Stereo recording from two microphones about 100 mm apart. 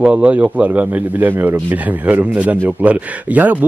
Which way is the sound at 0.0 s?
15° right (ahead or behind).